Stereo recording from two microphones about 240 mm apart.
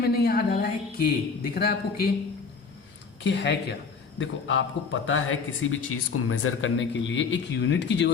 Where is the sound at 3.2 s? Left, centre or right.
Left.